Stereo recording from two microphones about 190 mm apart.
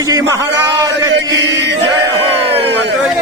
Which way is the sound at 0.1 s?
15° right (ahead or behind).